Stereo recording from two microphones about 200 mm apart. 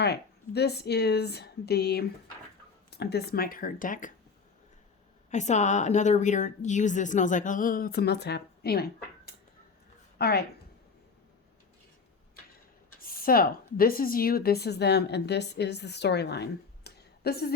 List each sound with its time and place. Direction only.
0.0 s speech: 55° left (ahead or behind)
5.3 s a woman's voice: 35° left (ahead or behind); by 8.9 s 50° left (ahead or behind)
10.2 s a woman's voice: 50° left (ahead or behind)
13.0 s a woman's voice: 45° left (ahead or behind)